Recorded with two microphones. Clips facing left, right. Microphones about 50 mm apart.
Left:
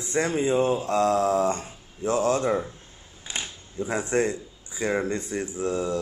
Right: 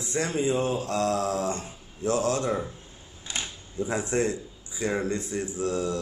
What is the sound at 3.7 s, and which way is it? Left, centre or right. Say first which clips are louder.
A man's voice: left 2 dB; left.